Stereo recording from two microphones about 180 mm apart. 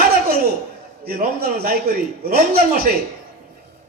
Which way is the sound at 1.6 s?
55° right (ahead or behind).